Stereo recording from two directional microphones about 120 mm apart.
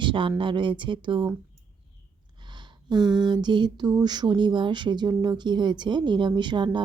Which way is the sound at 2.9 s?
35° right (ahead or behind).